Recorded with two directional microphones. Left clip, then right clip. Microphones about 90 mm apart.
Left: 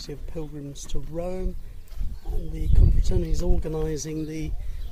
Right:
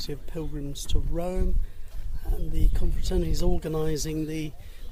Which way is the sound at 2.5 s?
35° right (ahead or behind).